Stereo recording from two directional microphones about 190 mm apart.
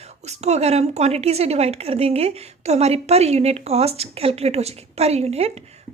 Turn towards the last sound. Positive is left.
turn(degrees=-35)  # may be behind; listen again after turning